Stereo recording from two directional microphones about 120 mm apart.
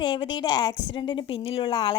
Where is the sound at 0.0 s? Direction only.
40° left (ahead or behind).